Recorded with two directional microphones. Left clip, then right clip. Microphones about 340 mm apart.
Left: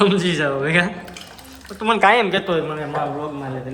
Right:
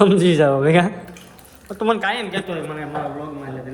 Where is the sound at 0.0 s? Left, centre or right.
Centre.